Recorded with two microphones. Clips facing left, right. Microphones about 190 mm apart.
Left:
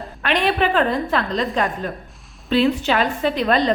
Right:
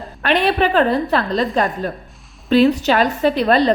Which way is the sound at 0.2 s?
40° right (ahead or behind).